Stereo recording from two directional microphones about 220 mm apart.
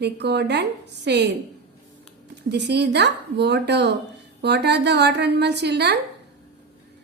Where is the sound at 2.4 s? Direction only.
50° right (ahead or behind).